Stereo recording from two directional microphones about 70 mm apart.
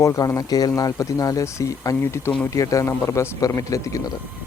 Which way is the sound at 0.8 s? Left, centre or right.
Left.